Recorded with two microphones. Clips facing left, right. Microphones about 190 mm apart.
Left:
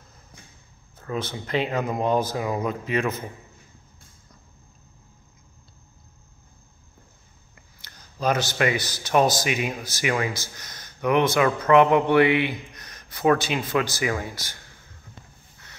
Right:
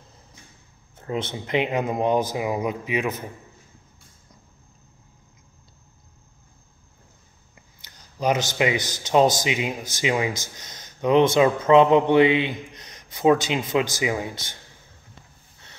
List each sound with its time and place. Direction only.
0.9 s speech: 25° right (ahead or behind)
7.8 s speech: 15° right (ahead or behind)